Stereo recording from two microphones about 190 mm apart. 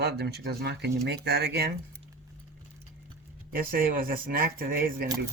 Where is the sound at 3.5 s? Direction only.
50° right (ahead or behind).